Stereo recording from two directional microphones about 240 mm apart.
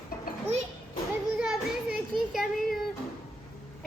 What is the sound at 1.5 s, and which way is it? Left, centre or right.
Child singing, centre.